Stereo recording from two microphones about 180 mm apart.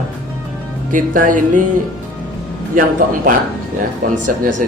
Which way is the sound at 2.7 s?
50° right (ahead or behind).